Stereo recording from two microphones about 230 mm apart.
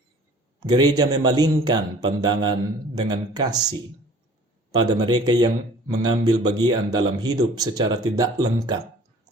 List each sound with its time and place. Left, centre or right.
0.6 s speech: centre